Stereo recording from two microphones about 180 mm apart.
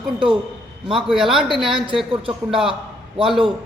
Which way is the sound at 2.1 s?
30° right (ahead or behind).